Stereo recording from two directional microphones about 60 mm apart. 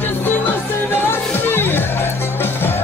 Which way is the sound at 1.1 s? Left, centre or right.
Left.